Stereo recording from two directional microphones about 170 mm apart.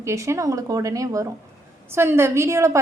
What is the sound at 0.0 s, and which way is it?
A woman's voice, 15° right (ahead or behind).